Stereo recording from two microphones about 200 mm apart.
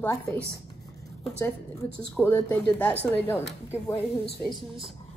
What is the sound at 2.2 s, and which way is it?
Speech, 15° left (ahead or behind).